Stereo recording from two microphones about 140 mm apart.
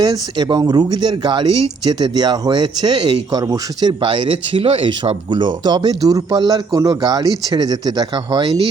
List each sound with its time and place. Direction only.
0.0 s speech: 30° right (ahead or behind)